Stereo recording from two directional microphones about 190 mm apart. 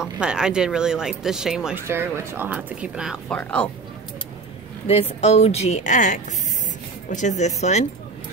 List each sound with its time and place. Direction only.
0.0 s speech: 5° right (ahead or behind)
3.3 s speech: 5° left (ahead or behind)
4.8 s a woman's voice: 30° left (ahead or behind)